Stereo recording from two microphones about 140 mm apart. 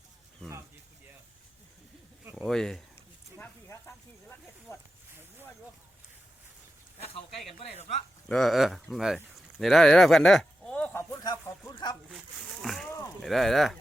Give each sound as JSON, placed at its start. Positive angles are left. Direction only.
{"t": 2.3, "sound": "speech", "side_deg": 5}
{"t": 3.7, "sound": "a sound", "side_deg": 20}
{"t": 7.0, "sound": "speech", "side_deg": 45}
{"t": 8.3, "sound": "speech", "side_deg": 5}
{"t": 11.1, "sound": "speech", "side_deg": 20}
{"t": 12.6, "sound": "speech", "side_deg": 0}